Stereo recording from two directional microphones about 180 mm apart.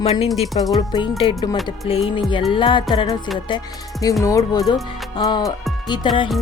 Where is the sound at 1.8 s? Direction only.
30° left (ahead or behind).